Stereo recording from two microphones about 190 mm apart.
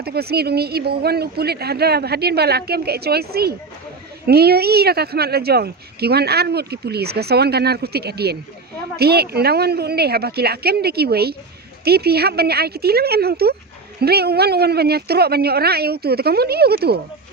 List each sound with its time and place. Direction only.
0.0 s speech: 55° right (ahead or behind)